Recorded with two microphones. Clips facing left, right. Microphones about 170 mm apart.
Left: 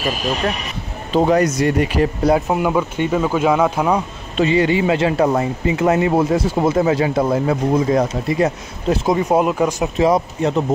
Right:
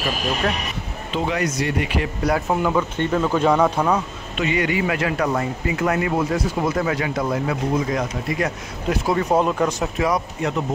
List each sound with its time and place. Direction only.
1.1 s speech: 40° left (ahead or behind)
2.2 s speech: 20° left (ahead or behind)
4.4 s speech: 30° left (ahead or behind)
8.9 s speech: 20° left (ahead or behind)
9.9 s speech: 25° left (ahead or behind)